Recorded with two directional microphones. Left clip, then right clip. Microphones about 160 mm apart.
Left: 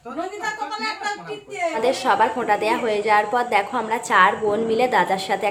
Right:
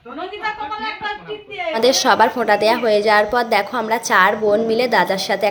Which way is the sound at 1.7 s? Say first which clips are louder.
Right 6 dB; 30° right (ahead or behind).